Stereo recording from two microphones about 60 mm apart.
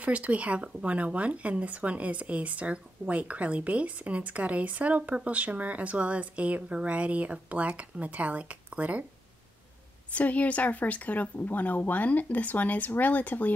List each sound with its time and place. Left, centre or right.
0.0 s speech: right
10.1 s a woman's voice: left